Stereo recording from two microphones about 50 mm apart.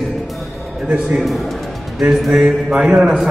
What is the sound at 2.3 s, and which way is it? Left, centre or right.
Speech, centre.